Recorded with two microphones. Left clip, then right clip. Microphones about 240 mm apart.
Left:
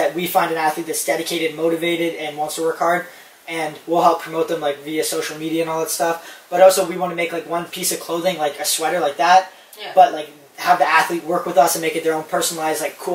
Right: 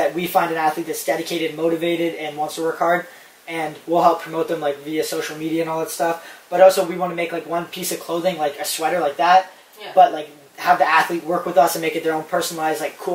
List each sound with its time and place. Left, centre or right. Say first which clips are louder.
0.0 s speech: left 1 dB; centre
11.2 s speech: left 1 dB; centre
11.7 s speech: left 1 dB; centre